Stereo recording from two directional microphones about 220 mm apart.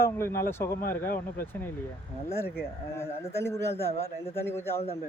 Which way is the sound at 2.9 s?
10° left (ahead or behind).